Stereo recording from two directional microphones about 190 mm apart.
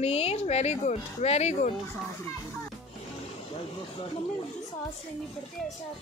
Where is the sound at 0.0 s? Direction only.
30° left (ahead or behind).